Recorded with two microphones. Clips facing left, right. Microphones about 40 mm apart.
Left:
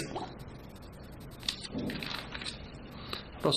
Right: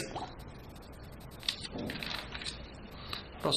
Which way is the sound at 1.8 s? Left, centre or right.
Centre.